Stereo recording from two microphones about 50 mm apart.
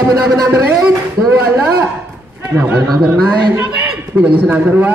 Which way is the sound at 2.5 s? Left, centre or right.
Right.